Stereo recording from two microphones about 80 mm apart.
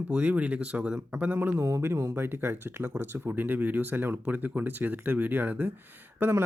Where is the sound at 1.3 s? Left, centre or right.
Right.